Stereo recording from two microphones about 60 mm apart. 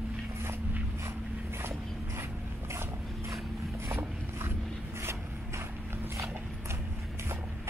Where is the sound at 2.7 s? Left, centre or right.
Right.